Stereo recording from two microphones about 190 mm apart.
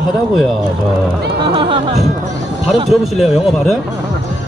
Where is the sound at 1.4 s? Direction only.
25° right (ahead or behind).